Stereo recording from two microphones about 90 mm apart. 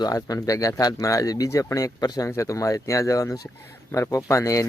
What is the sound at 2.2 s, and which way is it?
Speech, 35° left (ahead or behind).